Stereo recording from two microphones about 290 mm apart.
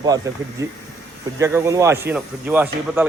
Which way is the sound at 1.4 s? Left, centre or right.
Centre.